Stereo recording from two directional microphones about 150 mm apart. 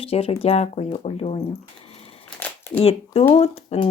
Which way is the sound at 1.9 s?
45° left (ahead or behind).